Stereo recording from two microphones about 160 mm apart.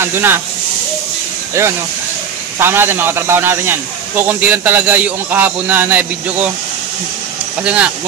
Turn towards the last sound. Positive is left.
turn(degrees=-10)  # may be behind; listen again after turning